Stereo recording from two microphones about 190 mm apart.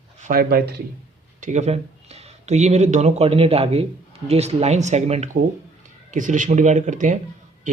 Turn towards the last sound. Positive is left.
turn(degrees=-45)  # may be behind; listen again after turning